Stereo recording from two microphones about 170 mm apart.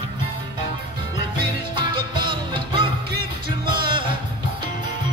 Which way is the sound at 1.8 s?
25° right (ahead or behind).